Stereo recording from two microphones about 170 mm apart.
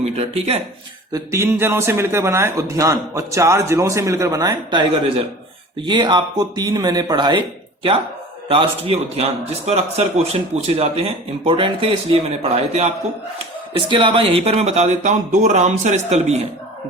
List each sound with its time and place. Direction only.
0.0 s a man's voice: 35° right (ahead or behind)
1.1 s a man's voice: 15° right (ahead or behind); by 16.4 s 40° right (ahead or behind)